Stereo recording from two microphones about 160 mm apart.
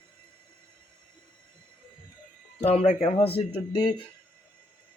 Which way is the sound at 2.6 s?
40° left (ahead or behind).